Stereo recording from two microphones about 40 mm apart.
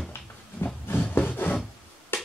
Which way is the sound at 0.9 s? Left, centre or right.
Left.